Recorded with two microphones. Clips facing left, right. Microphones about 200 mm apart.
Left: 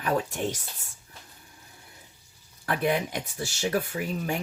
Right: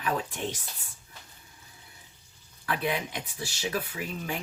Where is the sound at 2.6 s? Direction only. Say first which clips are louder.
Left 4 dB; 50° left (ahead or behind).